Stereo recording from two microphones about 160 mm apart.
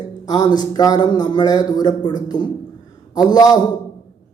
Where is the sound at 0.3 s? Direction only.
25° left (ahead or behind).